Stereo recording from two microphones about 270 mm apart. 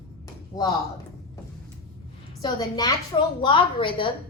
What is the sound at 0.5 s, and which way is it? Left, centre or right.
Speech, centre.